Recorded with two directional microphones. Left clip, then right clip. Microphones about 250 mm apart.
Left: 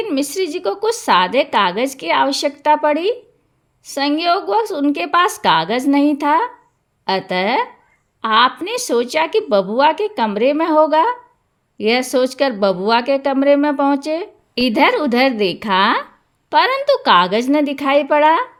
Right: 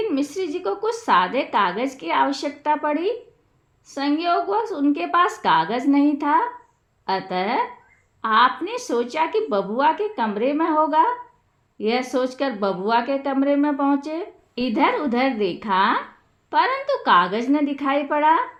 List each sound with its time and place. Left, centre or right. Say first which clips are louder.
0.0 s a woman's voice: left 4 dB; left